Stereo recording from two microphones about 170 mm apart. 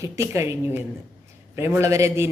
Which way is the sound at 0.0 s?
15° right (ahead or behind).